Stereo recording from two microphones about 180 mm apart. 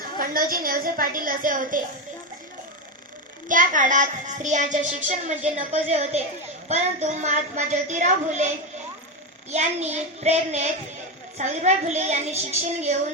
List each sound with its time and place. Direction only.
0.2 s speech: 50° right (ahead or behind)
3.5 s a child's voice: 45° right (ahead or behind)
9.5 s a child's voice: 40° right (ahead or behind)